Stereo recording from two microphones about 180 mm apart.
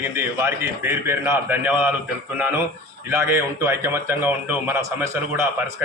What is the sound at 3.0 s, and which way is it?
A man's voice, 15° right (ahead or behind).